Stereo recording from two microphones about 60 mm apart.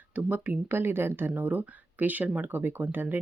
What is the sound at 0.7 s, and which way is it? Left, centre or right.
Speech, right.